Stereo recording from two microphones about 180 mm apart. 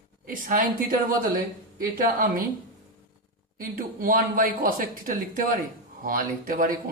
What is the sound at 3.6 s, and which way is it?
Speech, 50° right (ahead or behind).